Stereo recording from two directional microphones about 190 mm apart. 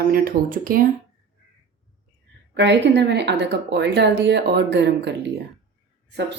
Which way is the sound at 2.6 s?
65° right (ahead or behind).